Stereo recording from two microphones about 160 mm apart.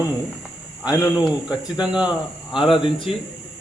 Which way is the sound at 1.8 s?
5° right (ahead or behind).